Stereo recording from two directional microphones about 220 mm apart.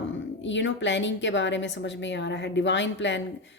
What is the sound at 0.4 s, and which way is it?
A woman's voice, 55° left (ahead or behind).